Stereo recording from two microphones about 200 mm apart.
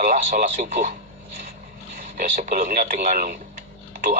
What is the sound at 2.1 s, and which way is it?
Speech, 45° right (ahead or behind).